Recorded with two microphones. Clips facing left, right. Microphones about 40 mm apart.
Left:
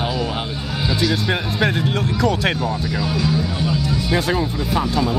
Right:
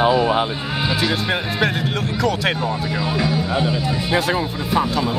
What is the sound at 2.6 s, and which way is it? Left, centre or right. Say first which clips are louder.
Speech: even; right.